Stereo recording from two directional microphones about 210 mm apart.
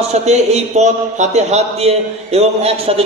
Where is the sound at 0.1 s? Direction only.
30° right (ahead or behind).